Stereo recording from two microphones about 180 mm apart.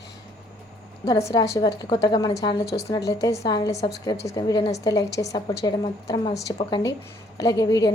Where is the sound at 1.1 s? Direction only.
20° left (ahead or behind).